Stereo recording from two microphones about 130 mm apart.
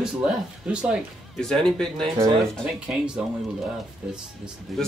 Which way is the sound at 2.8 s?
10° right (ahead or behind).